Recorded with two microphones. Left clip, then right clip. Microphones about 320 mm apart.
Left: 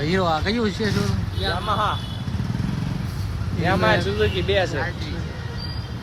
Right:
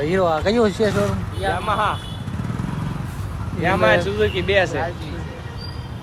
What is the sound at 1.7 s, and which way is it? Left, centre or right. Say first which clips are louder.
Speech: right 2 dB; right.